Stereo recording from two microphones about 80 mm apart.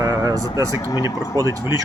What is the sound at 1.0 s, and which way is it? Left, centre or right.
Speech, right.